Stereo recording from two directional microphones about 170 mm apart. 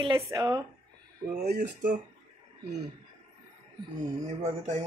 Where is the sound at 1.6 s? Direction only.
50° right (ahead or behind).